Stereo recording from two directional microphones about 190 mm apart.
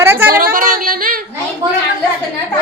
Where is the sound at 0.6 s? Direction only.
45° right (ahead or behind).